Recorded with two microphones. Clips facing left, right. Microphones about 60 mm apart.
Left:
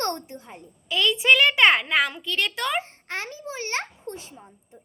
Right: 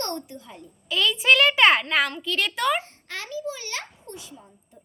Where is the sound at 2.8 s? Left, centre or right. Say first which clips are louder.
Left 4 dB; left.